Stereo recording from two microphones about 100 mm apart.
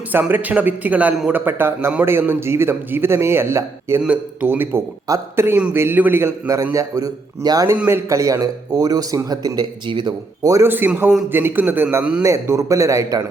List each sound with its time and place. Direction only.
0.1 s a man's voice: 20° right (ahead or behind)
4.0 s a man's voice: 15° right (ahead or behind)
5.0 s a man's voice: 35° right (ahead or behind)
5.5 s a man's voice: 20° right (ahead or behind); by 7.8 s 40° right (ahead or behind)
7.9 s a man's voice: 30° right (ahead or behind)
10.7 s a man's voice: 20° right (ahead or behind)